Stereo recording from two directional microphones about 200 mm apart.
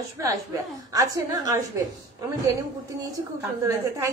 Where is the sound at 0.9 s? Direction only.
15° right (ahead or behind).